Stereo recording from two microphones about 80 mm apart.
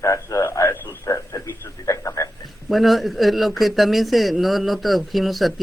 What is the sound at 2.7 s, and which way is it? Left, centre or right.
Speech, centre.